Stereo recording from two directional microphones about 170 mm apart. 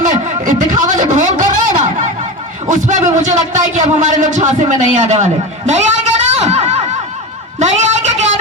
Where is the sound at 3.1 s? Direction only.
45° right (ahead or behind).